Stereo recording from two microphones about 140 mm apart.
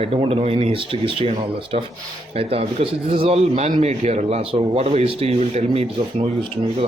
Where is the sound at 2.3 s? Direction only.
45° right (ahead or behind).